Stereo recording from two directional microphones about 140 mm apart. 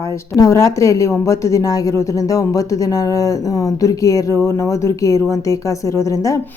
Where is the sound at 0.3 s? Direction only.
25° left (ahead or behind).